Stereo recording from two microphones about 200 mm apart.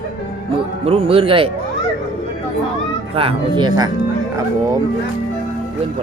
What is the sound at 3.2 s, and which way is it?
Speech, 25° right (ahead or behind).